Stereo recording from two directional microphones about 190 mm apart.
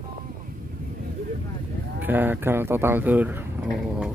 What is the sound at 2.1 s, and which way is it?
Speech, 10° right (ahead or behind).